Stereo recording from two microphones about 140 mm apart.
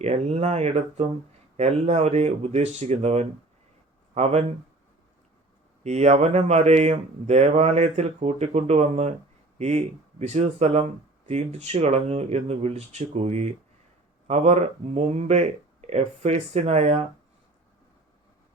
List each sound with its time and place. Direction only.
0.0 s speech: 50° right (ahead or behind)
5.8 s speech: 50° right (ahead or behind)